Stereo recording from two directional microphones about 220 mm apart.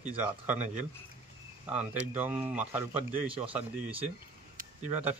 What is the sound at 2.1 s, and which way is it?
Speech, 10° right (ahead or behind).